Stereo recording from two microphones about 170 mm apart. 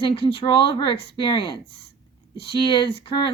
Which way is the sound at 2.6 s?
30° left (ahead or behind).